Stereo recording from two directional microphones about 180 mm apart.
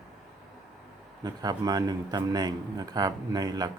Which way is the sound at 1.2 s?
20° right (ahead or behind).